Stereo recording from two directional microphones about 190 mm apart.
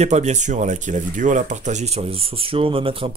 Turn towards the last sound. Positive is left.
turn(degrees=-30)  # may be behind; listen again after turning